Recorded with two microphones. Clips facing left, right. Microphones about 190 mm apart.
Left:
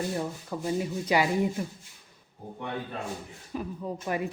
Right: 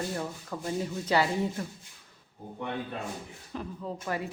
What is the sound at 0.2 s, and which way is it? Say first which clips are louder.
Speech: left 3 dB; 10° left (ahead or behind).